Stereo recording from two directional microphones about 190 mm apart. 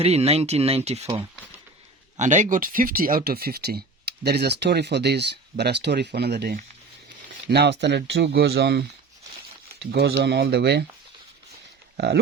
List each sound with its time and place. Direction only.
0.0 s speech: 35° right (ahead or behind); by 10.8 s 60° right (ahead or behind)
11.9 s speech: 60° right (ahead or behind)